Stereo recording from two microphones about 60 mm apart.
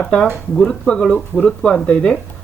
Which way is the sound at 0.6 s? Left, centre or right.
Centre.